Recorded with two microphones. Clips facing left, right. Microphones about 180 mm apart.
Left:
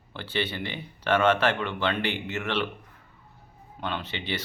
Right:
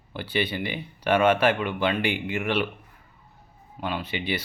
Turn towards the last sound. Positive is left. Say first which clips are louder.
# right 3 dB
turn(degrees=-10)  # may be behind; listen again after turning